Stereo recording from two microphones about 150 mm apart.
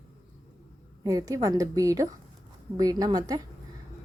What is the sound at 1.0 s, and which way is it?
A woman's voice, 25° right (ahead or behind).